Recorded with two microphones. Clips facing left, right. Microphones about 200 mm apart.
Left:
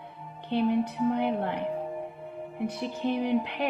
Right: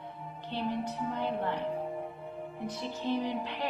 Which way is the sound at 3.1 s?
60° left (ahead or behind).